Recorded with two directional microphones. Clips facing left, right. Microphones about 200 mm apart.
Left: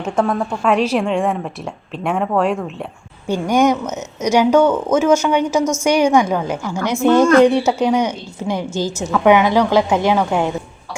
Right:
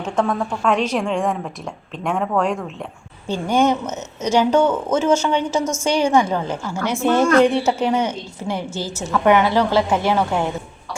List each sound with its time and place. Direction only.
0.0 s a woman's voice: 10° left (ahead or behind)